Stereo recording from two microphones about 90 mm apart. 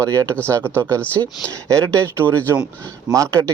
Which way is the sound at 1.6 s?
35° right (ahead or behind).